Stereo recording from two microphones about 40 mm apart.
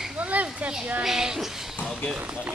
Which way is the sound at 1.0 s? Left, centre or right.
Centre.